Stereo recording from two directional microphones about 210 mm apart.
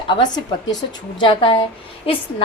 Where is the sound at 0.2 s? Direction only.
20° left (ahead or behind).